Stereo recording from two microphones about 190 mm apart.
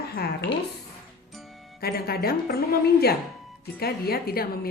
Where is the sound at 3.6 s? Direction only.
55° left (ahead or behind).